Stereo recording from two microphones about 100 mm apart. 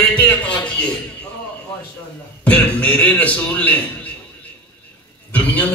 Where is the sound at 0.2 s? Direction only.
15° left (ahead or behind).